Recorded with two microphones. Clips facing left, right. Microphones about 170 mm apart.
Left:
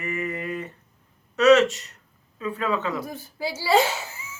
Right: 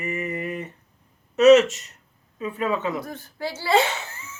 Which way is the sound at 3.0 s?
10° left (ahead or behind).